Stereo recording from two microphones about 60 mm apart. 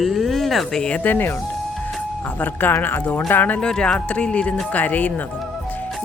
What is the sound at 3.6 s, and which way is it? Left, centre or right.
Speech, centre.